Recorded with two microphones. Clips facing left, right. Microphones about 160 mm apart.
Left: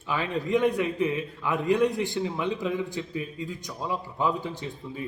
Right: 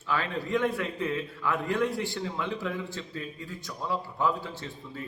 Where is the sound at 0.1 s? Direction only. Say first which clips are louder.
Left 3 dB; 15° left (ahead or behind).